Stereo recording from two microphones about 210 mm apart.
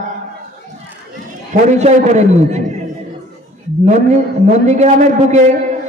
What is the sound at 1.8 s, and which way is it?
Speech, 35° right (ahead or behind).